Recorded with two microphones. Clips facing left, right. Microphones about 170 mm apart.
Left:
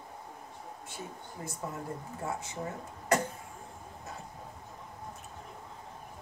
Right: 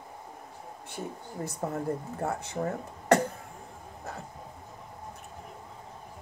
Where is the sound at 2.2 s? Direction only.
60° right (ahead or behind).